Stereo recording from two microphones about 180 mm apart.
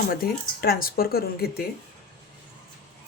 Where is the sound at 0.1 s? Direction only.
55° left (ahead or behind).